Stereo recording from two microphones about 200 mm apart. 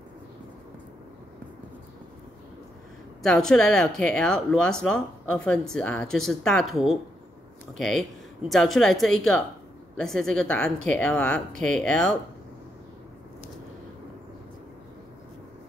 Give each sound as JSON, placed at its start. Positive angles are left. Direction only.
{"t": 3.2, "sound": "speech", "side_deg": 5}